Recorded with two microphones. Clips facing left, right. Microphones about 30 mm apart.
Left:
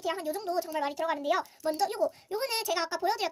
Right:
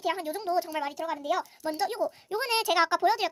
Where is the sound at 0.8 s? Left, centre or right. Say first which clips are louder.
Left 2 dB; centre.